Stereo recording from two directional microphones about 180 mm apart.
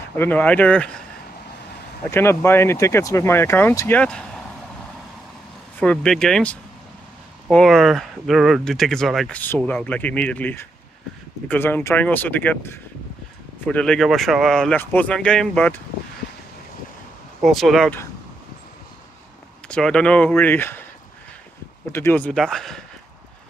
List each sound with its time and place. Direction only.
0.2 s speech: 10° left (ahead or behind)
2.0 s speech: 15° left (ahead or behind)
5.8 s speech: 5° left (ahead or behind)
17.4 s speech: centre (ahead or behind)
19.7 s speech: 5° left (ahead or behind)
21.9 s speech: 10° left (ahead or behind)